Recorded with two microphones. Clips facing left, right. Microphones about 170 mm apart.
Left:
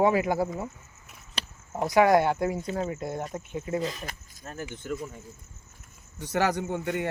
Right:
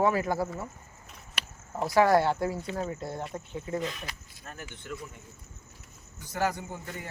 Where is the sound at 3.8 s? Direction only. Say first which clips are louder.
Left 3 dB; 35° left (ahead or behind).